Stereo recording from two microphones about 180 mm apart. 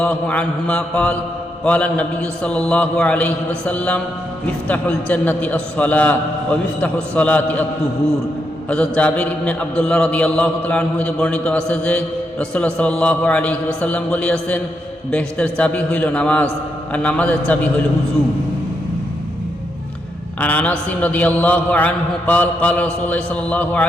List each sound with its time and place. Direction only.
0.0 s mantra: 5° left (ahead or behind)
8.7 s mantra: 5° left (ahead or behind)
20.4 s mantra: 10° left (ahead or behind)